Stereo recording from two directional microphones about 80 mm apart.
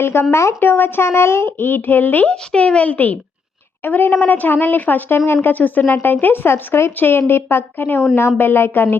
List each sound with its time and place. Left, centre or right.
0.0 s speech: left
2.3 s speech: centre